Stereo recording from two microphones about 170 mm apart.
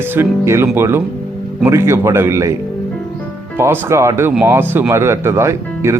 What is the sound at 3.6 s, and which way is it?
Speech, 15° right (ahead or behind).